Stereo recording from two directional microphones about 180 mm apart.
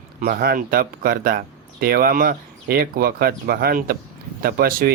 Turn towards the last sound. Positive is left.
turn(degrees=-55)  # may be behind; listen again after turning